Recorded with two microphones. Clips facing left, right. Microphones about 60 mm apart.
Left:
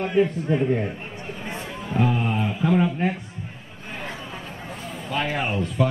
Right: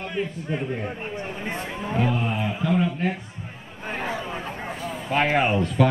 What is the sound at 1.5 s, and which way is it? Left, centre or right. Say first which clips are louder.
Music: right 2 dB; right.